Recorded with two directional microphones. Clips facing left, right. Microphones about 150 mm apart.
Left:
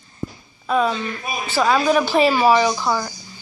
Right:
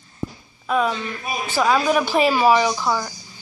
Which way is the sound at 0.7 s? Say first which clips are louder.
Left 2 dB; 5° right (ahead or behind).